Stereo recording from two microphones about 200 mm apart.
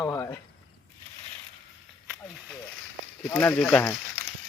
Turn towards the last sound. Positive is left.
turn(degrees=5)  # may be behind; listen again after turning